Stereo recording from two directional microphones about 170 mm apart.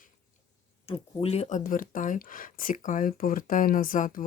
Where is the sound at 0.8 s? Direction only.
35° left (ahead or behind); by 4.2 s 55° left (ahead or behind).